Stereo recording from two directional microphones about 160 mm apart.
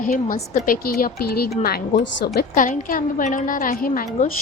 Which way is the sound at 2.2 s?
65° left (ahead or behind).